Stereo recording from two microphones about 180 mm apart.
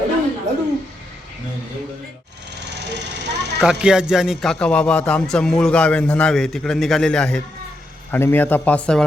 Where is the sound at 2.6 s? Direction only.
70° right (ahead or behind).